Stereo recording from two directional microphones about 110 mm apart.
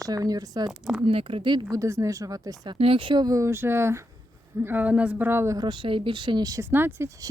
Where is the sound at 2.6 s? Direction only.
50° right (ahead or behind).